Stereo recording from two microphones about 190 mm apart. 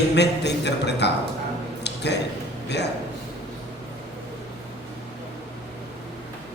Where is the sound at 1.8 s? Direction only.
65° left (ahead or behind).